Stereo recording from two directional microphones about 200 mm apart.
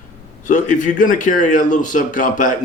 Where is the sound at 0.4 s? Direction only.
40° left (ahead or behind).